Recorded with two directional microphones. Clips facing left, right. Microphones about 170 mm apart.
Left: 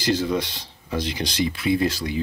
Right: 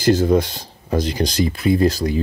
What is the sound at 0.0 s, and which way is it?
Speech, 50° right (ahead or behind).